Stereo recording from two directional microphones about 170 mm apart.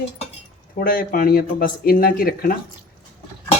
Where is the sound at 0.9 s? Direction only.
55° left (ahead or behind).